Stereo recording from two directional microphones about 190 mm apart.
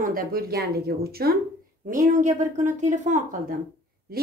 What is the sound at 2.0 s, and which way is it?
A woman's voice, 40° right (ahead or behind).